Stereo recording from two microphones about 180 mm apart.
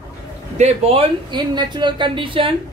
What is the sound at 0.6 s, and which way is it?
Speech, 35° right (ahead or behind).